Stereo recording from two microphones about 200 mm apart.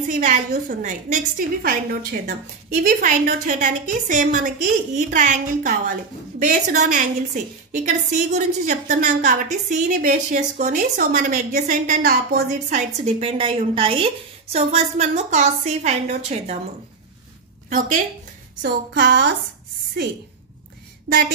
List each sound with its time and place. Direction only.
0.0 s a woman's voice: 40° right (ahead or behind)
17.6 s a woman's voice: 40° right (ahead or behind)
18.6 s a sound: 55° right (ahead or behind)